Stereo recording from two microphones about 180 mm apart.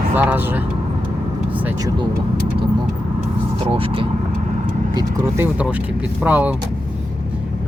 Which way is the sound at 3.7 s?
30° right (ahead or behind).